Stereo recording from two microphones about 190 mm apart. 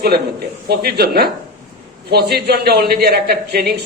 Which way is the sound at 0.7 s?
55° right (ahead or behind).